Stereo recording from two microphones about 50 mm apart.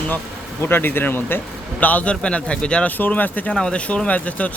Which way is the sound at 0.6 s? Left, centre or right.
Left.